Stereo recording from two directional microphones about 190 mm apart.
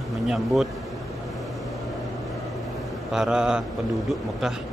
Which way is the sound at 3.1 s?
5° right (ahead or behind).